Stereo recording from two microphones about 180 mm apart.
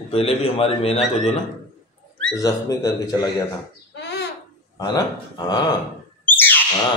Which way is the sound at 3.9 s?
70° left (ahead or behind).